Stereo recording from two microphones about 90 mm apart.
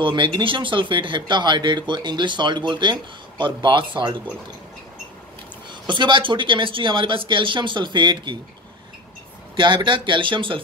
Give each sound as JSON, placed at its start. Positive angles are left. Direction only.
{"t": 0.0, "sound": "speech", "side_deg": -65}
{"t": 5.9, "sound": "speech", "side_deg": -60}
{"t": 9.6, "sound": "speech", "side_deg": -60}